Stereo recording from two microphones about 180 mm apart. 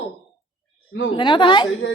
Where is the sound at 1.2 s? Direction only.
30° left (ahead or behind).